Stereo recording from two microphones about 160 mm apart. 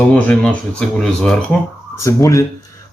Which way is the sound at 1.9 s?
20° left (ahead or behind).